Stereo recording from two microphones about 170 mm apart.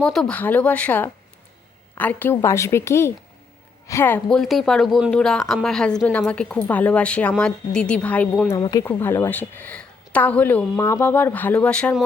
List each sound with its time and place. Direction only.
0.0 s a woman's voice: 5° left (ahead or behind)
8.5 s speech: 25° left (ahead or behind)
8.8 s a woman's voice: 15° left (ahead or behind)